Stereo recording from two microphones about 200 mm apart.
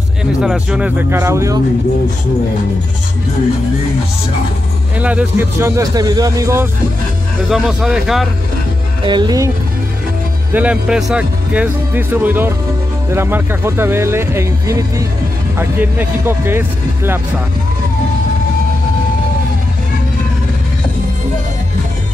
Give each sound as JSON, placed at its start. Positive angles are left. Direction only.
{"t": 0.2, "sound": "speech", "side_deg": -5}
{"t": 4.9, "sound": "speech", "side_deg": -5}
{"t": 7.4, "sound": "speech", "side_deg": 0}
{"t": 9.0, "sound": "speech", "side_deg": -20}
{"t": 10.5, "sound": "speech", "side_deg": -5}